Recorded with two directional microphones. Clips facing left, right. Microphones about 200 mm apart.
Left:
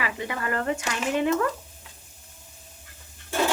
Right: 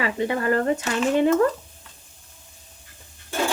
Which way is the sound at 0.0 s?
30° right (ahead or behind).